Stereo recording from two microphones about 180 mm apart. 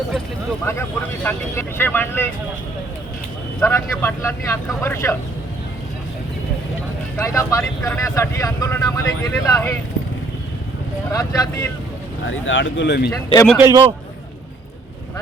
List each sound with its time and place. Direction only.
0.6 s speech: 10° left (ahead or behind)
3.7 s speech: 15° left (ahead or behind)
7.2 s speech: 15° left (ahead or behind)
11.1 s speech: 20° left (ahead or behind)
12.3 s speech: 90° left
13.1 s speech: 20° left (ahead or behind)
13.6 s a man's voice: 15° right (ahead or behind)